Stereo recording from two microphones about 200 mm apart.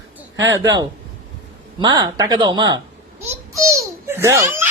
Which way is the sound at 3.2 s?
15° right (ahead or behind).